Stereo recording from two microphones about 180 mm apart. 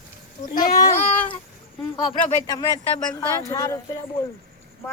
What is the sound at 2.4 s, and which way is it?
Speech, 20° left (ahead or behind).